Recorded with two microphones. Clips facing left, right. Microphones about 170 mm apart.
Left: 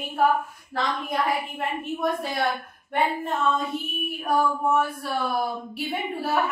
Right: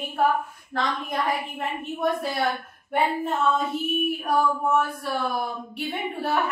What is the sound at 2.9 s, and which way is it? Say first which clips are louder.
Female singing: right 1 dB; centre (ahead or behind).